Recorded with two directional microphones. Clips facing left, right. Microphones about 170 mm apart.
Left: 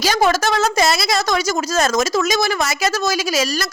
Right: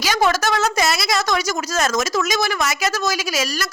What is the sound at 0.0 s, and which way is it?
A woman's voice, 35° left (ahead or behind).